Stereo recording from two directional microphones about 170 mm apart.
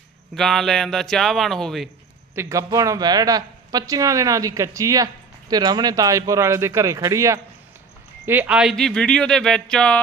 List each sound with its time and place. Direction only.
0.3 s speech: centre (ahead or behind)
2.3 s a man's voice: 15° right (ahead or behind)
8.3 s speech: 10° right (ahead or behind)